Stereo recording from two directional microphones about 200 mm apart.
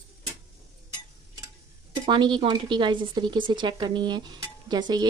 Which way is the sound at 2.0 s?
20° right (ahead or behind).